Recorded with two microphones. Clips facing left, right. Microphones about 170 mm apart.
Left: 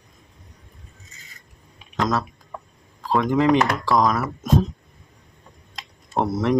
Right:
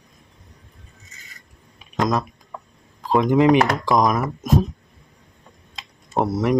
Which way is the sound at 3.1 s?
15° right (ahead or behind).